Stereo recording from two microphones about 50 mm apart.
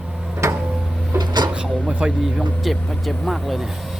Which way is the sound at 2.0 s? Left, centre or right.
Centre.